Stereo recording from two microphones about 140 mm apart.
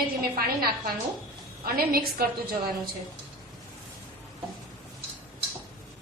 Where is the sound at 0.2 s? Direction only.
90° right.